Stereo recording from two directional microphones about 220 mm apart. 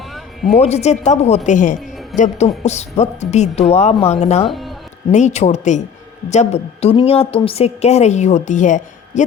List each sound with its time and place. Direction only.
0.5 s a woman's voice: 30° left (ahead or behind)
4.4 s speech: centre (ahead or behind)
5.1 s a woman's voice: 30° left (ahead or behind)